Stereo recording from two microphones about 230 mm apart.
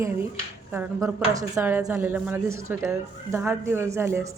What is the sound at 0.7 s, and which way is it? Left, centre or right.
Speech, centre.